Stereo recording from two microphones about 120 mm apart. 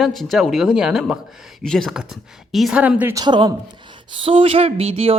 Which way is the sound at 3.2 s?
40° right (ahead or behind).